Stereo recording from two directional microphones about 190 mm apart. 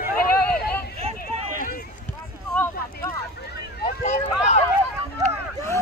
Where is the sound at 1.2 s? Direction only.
50° left (ahead or behind).